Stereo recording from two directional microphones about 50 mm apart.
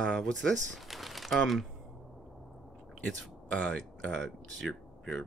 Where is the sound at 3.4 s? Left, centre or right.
Left.